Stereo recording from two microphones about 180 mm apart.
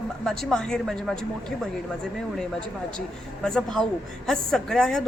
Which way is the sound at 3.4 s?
5° left (ahead or behind).